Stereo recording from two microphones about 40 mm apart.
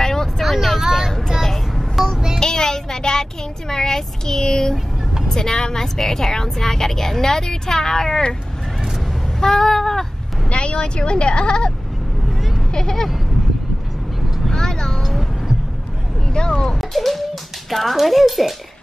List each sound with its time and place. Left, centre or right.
0.0 s vehicle: centre
0.4 s vehicle: centre
1.4 s a sound: centre
2.4 s child singing: centre
5.3 s a woman's voice: centre
9.4 s a woman's voice: centre
10.5 s speech: left
12.7 s a woman's voice: centre
14.5 s vehicle: centre
16.3 s speech: left
16.6 s a child's voice: centre